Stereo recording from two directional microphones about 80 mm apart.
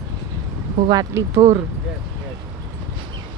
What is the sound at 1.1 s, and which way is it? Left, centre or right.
Speech, right.